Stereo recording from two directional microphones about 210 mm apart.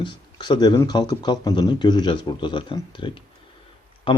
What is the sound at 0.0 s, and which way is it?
Speech, 20° left (ahead or behind).